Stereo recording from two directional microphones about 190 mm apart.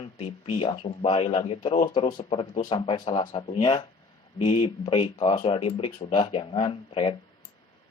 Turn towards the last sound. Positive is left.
turn(degrees=30)  # may be behind; listen again after turning